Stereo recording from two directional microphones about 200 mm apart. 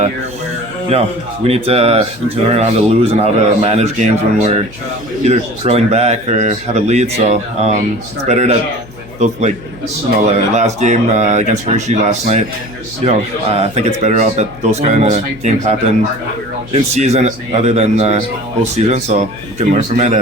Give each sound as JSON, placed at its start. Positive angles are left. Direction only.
{"t": 1.5, "sound": "speech", "side_deg": -30}
{"t": 10.2, "sound": "speech", "side_deg": -35}
{"t": 16.7, "sound": "speech", "side_deg": -35}